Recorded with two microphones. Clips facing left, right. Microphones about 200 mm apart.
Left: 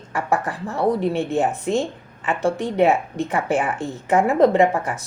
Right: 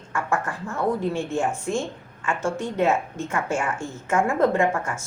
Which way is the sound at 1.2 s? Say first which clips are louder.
Left 4 dB; 20° left (ahead or behind).